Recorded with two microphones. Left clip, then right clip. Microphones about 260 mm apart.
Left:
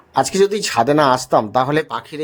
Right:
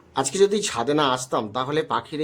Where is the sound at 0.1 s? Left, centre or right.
Left.